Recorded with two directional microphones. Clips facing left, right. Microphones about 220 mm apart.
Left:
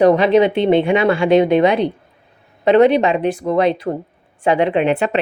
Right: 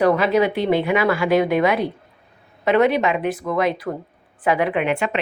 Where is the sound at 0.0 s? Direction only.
25° left (ahead or behind).